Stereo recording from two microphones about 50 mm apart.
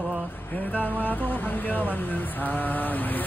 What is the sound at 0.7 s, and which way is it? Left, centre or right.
Speech, left.